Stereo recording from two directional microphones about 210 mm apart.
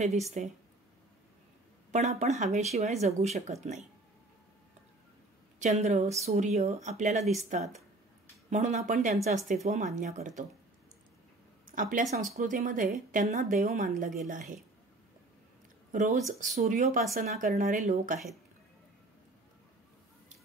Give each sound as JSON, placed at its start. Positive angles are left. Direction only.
{"t": 0.4, "sound": "speech", "side_deg": -35}
{"t": 1.9, "sound": "speech", "side_deg": -35}
{"t": 5.6, "sound": "speech", "side_deg": -30}
{"t": 11.6, "sound": "speech", "side_deg": -40}
{"t": 15.9, "sound": "speech", "side_deg": -35}
{"t": 17.6, "sound": "speech", "side_deg": -35}